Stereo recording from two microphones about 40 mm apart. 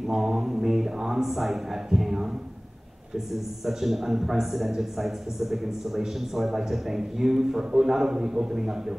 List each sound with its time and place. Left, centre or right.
0.0 s a man's voice: centre
3.6 s a man's voice: centre